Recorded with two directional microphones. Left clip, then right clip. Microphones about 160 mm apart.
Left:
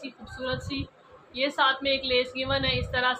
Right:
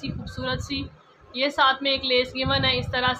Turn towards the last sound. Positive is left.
turn(degrees=-45)  # may be behind; listen again after turning